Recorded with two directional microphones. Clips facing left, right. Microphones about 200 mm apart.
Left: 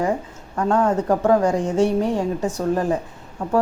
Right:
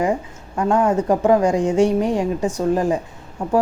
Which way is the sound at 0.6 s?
10° right (ahead or behind).